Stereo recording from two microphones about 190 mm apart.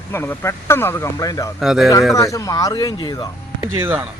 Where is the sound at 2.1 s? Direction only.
15° left (ahead or behind).